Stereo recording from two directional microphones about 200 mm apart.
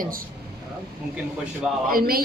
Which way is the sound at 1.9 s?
45° right (ahead or behind).